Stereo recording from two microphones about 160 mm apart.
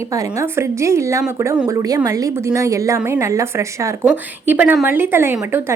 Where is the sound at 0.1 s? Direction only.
20° right (ahead or behind).